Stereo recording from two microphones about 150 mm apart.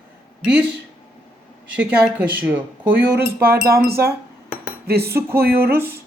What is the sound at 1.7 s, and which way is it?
Speech, 10° right (ahead or behind).